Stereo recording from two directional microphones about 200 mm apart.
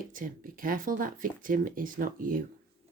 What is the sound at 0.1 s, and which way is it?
Speech, 45° right (ahead or behind).